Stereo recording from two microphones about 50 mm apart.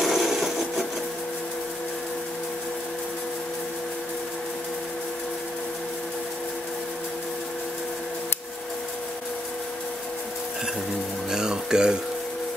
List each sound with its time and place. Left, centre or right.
0.0 s sewing machine: centre
11.2 s music: centre